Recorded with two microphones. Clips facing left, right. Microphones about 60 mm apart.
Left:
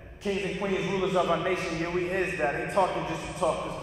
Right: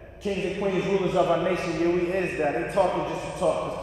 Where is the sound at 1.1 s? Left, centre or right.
Centre.